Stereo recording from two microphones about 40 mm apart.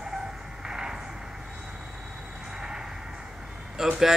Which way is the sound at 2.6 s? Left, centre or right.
Centre.